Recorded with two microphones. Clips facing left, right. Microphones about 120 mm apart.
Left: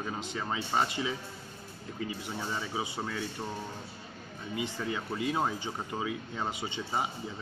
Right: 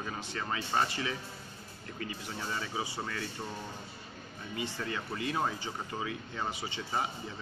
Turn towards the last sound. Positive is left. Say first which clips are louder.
# left 2 dB
turn(degrees=20)  # may be behind; listen again after turning